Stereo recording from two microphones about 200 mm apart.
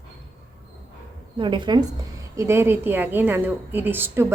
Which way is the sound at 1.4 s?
25° right (ahead or behind).